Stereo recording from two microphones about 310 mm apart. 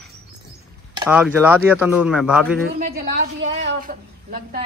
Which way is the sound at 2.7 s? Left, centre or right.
Right.